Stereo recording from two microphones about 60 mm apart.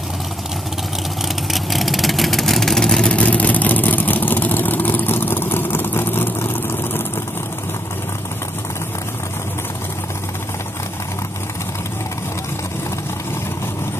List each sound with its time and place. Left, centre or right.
1.5 s vehicle: centre
3.1 s vehicle: left